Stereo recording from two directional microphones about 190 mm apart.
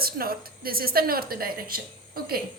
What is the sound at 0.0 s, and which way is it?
A woman's voice, 50° right (ahead or behind).